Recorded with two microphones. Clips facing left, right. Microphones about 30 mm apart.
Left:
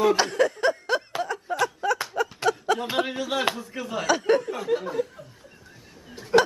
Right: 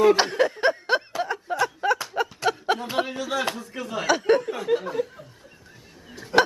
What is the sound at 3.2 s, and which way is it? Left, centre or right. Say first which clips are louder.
Speech: left 1 dB; centre.